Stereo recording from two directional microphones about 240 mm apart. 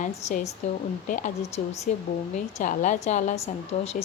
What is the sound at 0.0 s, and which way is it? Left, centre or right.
A woman's voice, left.